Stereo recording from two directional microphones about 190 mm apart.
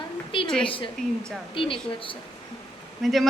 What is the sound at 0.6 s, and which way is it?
Speech, 25° left (ahead or behind).